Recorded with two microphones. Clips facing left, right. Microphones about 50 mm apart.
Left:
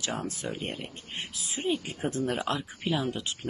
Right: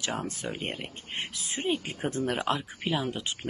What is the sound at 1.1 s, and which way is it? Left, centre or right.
Speech, right.